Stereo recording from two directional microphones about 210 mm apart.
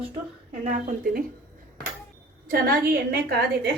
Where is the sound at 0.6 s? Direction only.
40° right (ahead or behind).